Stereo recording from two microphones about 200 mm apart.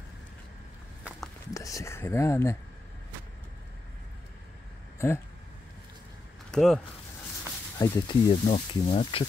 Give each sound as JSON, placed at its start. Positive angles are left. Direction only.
{"t": 1.5, "sound": "speech", "side_deg": 15}
{"t": 4.9, "sound": "a sound", "side_deg": 15}
{"t": 6.5, "sound": "speech", "side_deg": 0}
{"t": 7.8, "sound": "speech", "side_deg": 25}